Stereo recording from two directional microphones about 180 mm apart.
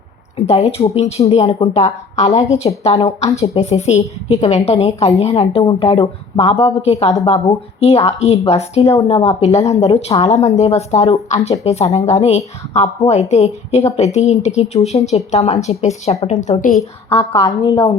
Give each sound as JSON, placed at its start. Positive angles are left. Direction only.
{"t": 0.4, "sound": "speech", "side_deg": 35}
{"t": 8.8, "sound": "a woman's voice", "side_deg": 15}
{"t": 9.0, "sound": "speech", "side_deg": 35}
{"t": 17.1, "sound": "a woman's voice", "side_deg": 20}